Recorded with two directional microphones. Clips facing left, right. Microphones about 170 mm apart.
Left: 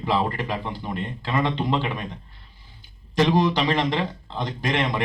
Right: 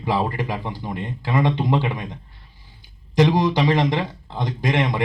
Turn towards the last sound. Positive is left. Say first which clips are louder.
# right 3 dB
turn(degrees=-15)  # may be behind; listen again after turning